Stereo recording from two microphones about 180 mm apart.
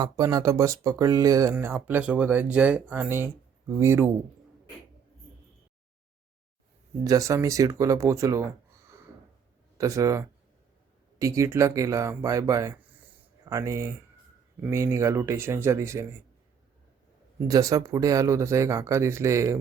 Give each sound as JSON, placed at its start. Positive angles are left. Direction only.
{"t": 0.0, "sound": "speech", "side_deg": -20}
{"t": 7.0, "sound": "speech", "side_deg": -20}
{"t": 9.7, "sound": "speech", "side_deg": -20}
{"t": 17.5, "sound": "speech", "side_deg": -20}